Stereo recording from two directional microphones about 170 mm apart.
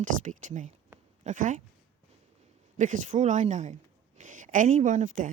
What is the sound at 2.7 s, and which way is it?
Speech, 50° right (ahead or behind).